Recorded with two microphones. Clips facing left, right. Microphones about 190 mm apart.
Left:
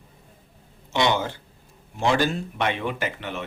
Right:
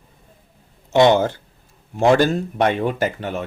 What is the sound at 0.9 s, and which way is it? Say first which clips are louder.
Speech: right 9 dB; 50° right (ahead or behind).